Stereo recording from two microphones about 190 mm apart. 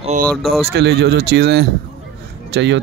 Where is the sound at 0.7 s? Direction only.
60° right (ahead or behind).